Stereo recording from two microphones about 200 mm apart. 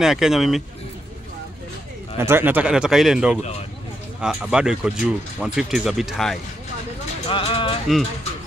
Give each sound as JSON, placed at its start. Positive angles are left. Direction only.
{"t": 0.0, "sound": "speech", "side_deg": 0}
{"t": 2.1, "sound": "speech", "side_deg": -10}
{"t": 7.2, "sound": "speech", "side_deg": 25}